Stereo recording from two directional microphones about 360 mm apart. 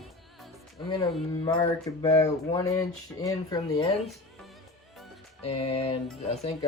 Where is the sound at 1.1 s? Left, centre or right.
Centre.